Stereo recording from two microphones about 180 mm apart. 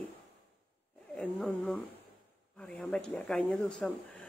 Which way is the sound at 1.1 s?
5° left (ahead or behind).